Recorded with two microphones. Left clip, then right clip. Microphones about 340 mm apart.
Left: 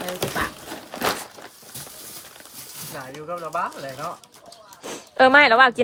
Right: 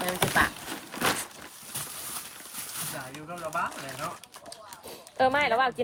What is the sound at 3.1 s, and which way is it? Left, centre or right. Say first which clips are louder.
Speech: left 6 dB; centre.